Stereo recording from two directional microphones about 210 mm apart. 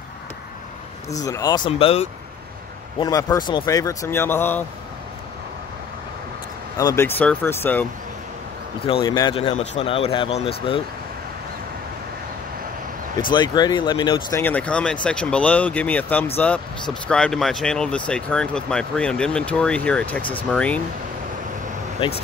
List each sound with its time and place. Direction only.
1.1 s speech: 15° left (ahead or behind)
3.0 s speech: 15° left (ahead or behind)
6.8 s speech: 15° left (ahead or behind)
9.0 s speech: 20° left (ahead or behind)
13.3 s speech: 20° left (ahead or behind)
14.4 s speech: 5° left (ahead or behind)